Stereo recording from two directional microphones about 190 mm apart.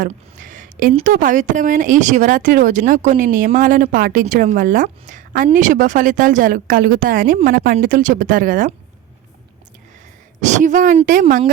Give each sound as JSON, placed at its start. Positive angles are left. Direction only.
{"t": 0.0, "sound": "speech", "side_deg": -45}
{"t": 10.4, "sound": "speech", "side_deg": -40}